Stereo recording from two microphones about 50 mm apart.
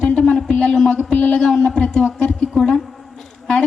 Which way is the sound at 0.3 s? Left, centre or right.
Centre.